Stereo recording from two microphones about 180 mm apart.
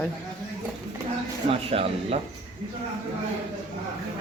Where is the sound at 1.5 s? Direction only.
30° right (ahead or behind).